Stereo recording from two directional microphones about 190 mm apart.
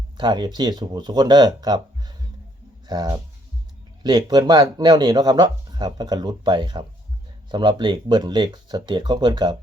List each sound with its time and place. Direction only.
0.2 s speech: 25° right (ahead or behind)